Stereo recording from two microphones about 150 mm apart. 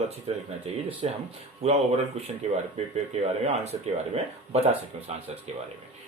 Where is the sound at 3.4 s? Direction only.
45° right (ahead or behind).